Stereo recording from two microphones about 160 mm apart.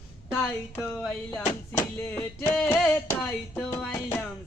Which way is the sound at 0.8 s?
5° left (ahead or behind).